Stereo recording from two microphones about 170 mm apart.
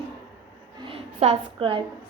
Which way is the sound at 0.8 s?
35° right (ahead or behind).